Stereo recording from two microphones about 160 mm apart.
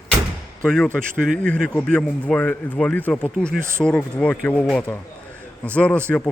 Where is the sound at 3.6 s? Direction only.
15° right (ahead or behind).